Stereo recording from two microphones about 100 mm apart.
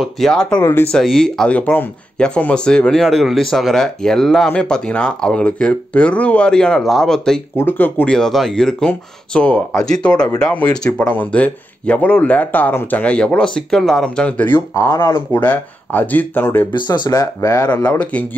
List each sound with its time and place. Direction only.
0.0 s speech: 5° left (ahead or behind)
0.6 s speech: 20° left (ahead or behind)
0.9 s speech: 5° left (ahead or behind)
1.6 s speech: 20° left (ahead or behind)
7.5 s speech: 20° left (ahead or behind)
8.1 s speech: 5° left (ahead or behind)
14.7 s speech: 30° left (ahead or behind)
16.7 s speech: 45° left (ahead or behind)
17.8 s speech: 15° left (ahead or behind)